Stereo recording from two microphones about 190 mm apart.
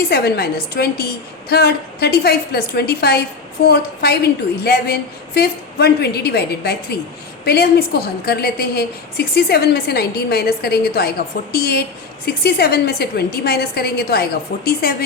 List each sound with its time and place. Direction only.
0.1 s a woman's voice: 55° left (ahead or behind)